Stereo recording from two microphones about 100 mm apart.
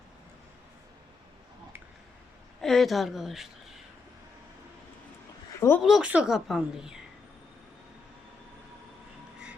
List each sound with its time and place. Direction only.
2.6 s a woman's voice: 5° left (ahead or behind)
5.5 s speech: 25° left (ahead or behind)
5.8 s a woman's voice: centre (ahead or behind)